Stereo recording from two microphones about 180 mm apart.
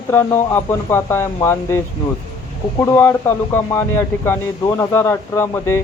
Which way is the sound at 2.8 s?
10° left (ahead or behind).